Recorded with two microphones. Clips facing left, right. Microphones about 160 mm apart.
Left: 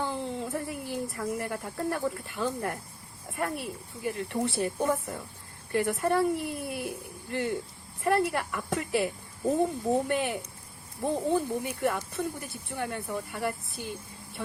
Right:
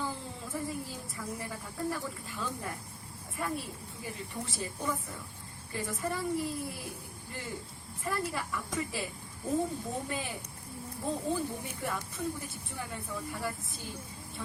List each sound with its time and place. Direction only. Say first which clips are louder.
0.0 s speech: left 7 dB; 70° left (ahead or behind)
10.1 s speech: left 8 dB; 70° left (ahead or behind)